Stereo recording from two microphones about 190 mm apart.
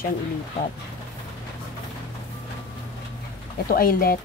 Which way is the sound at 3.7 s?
50° left (ahead or behind).